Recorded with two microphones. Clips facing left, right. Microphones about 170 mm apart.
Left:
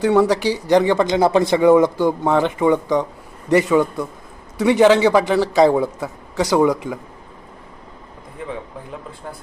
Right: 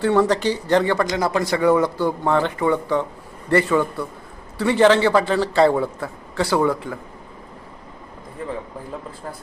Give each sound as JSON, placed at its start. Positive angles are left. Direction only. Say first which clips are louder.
{"t": 0.0, "sound": "speech", "louder": "left 2 dB", "side_deg": 15}